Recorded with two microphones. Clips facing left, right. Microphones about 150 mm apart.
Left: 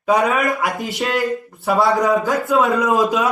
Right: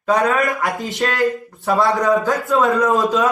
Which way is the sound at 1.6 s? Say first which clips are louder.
Even; 10° left (ahead or behind).